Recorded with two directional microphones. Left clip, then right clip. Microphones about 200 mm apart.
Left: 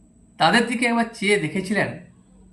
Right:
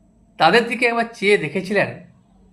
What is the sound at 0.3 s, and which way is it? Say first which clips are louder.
Speech: right 3 dB; 30° right (ahead or behind).